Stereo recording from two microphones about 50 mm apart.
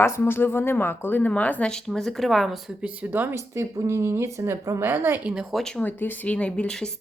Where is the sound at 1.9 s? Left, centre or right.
Centre.